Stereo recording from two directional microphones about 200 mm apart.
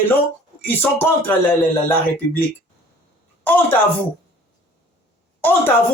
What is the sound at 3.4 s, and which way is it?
Speech, 10° left (ahead or behind).